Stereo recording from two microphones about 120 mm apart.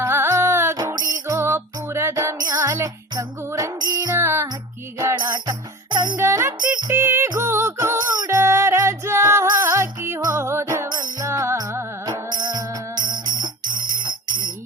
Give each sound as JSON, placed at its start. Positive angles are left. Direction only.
{"t": 0.0, "sound": "music", "side_deg": -20}
{"t": 0.8, "sound": "music", "side_deg": -35}
{"t": 1.3, "sound": "music", "side_deg": -25}
{"t": 4.2, "sound": "music", "side_deg": -20}
{"t": 4.9, "sound": "music", "side_deg": -30}
{"t": 12.3, "sound": "music", "side_deg": -35}